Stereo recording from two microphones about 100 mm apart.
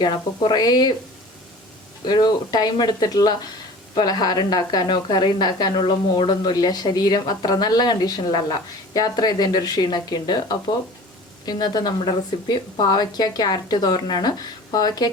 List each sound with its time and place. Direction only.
0.0 s a woman's voice: 45° left (ahead or behind)
2.0 s a woman's voice: 45° left (ahead or behind)